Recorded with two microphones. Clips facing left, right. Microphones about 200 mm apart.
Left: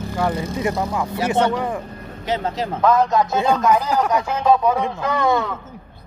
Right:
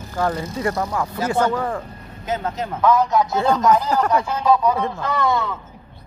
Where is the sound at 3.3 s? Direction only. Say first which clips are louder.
Even; 15° left (ahead or behind).